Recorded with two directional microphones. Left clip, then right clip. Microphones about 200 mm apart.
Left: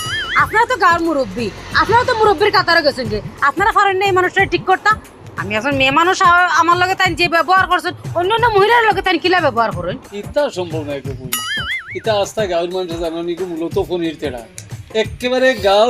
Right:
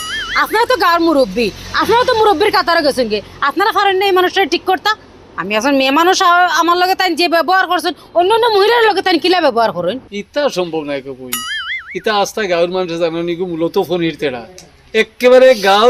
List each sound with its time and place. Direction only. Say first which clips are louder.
0.0 s music: even; centre (ahead or behind)
0.3 s a woman's voice: right 1 dB; 25° right (ahead or behind)
10.2 s speech: even; 55° right (ahead or behind)
11.3 s music: left 1 dB; centre (ahead or behind)
12.0 s speech: right 2 dB; 50° right (ahead or behind)